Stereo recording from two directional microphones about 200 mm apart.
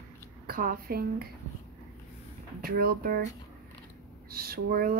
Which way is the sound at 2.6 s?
45° right (ahead or behind).